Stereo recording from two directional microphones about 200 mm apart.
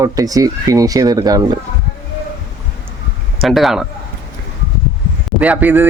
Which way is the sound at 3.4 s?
Centre (ahead or behind).